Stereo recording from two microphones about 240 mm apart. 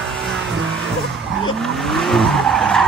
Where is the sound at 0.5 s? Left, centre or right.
Centre.